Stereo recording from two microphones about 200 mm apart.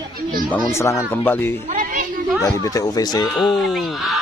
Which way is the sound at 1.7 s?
40° right (ahead or behind).